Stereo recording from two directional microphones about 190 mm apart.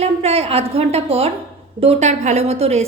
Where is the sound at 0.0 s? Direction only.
35° right (ahead or behind).